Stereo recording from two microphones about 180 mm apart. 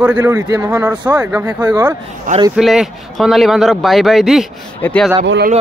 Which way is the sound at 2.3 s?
50° right (ahead or behind).